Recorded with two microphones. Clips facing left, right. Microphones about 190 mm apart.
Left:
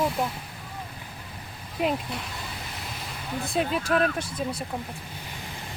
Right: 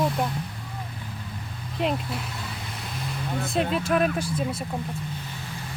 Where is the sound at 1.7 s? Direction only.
Centre (ahead or behind).